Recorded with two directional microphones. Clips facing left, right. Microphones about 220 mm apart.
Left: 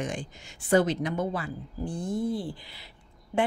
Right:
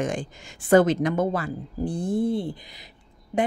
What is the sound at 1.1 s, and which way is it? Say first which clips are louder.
Speech: right 5 dB; 45° right (ahead or behind).